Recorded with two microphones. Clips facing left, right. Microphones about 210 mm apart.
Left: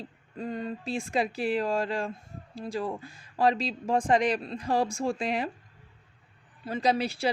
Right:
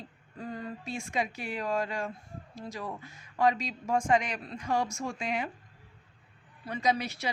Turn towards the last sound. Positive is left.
turn(degrees=30)  # may be behind; listen again after turning